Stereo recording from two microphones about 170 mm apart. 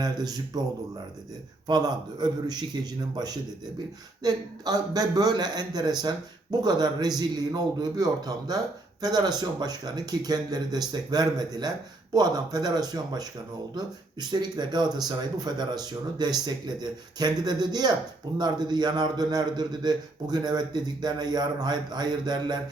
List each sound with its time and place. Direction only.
0.0 s a man's voice: 25° right (ahead or behind)
1.6 s a man's voice: 25° right (ahead or behind)
4.2 s a man's voice: 20° right (ahead or behind)